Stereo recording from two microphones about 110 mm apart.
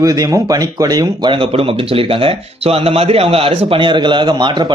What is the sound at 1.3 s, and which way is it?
Speech, 55° right (ahead or behind).